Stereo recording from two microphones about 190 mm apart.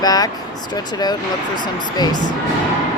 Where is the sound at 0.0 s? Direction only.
20° left (ahead or behind).